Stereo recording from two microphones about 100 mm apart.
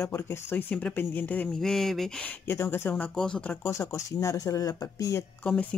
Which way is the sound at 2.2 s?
25° left (ahead or behind).